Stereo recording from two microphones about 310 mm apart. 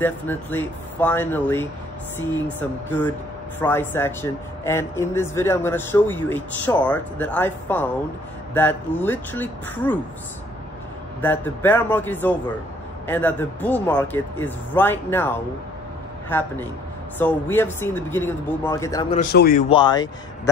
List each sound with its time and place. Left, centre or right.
0.0 s speech: centre
3.6 s speech: centre
11.1 s a man's voice: centre
19.1 s a man's voice: left
19.7 s speech: centre